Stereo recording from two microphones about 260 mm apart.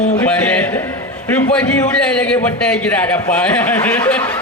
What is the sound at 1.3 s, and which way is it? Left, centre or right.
A man's voice, centre.